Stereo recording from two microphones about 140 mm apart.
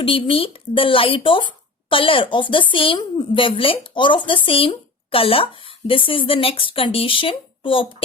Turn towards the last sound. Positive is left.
turn(degrees=40)  # may be behind; listen again after turning